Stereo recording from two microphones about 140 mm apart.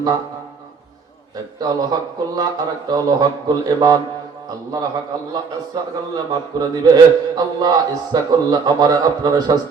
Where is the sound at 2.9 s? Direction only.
30° right (ahead or behind).